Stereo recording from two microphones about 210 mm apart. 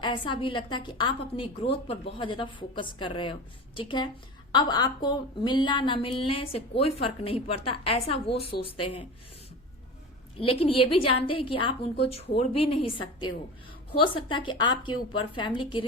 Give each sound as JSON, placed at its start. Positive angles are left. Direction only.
{"t": 0.0, "sound": "speech", "side_deg": 25}
{"t": 10.3, "sound": "speech", "side_deg": 25}